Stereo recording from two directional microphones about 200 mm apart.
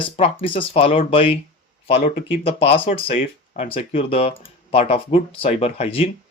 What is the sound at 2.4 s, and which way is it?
Speech, 30° left (ahead or behind).